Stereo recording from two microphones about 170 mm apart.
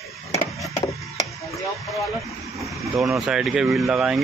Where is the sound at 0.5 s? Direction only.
20° left (ahead or behind).